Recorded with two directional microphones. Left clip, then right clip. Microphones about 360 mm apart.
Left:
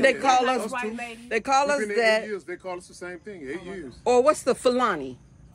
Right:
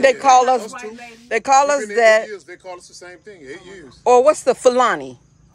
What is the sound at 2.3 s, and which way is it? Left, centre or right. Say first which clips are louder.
Speech: even; left.